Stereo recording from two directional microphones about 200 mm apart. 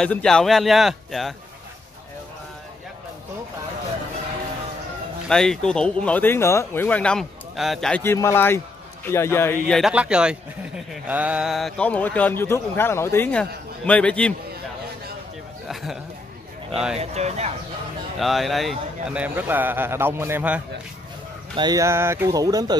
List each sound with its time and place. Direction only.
0.0 s speech: 5° left (ahead or behind)
5.3 s speech: 5° left (ahead or behind)
9.8 s speech: 5° right (ahead or behind)
15.7 s a sound: centre (ahead or behind)
16.9 s speech: 30° right (ahead or behind)
18.2 s a man's voice: centre (ahead or behind)
21.5 s a man's voice: 20° right (ahead or behind)